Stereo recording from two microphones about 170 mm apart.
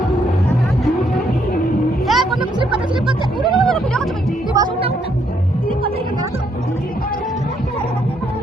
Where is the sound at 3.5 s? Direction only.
Centre (ahead or behind).